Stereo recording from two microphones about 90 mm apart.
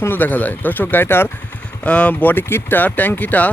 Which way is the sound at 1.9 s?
15° left (ahead or behind).